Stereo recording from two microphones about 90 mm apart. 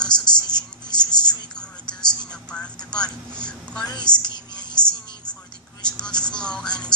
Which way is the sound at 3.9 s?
55° left (ahead or behind).